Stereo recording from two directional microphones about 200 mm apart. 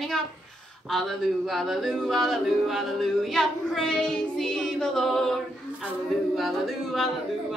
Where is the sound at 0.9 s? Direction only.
Centre (ahead or behind).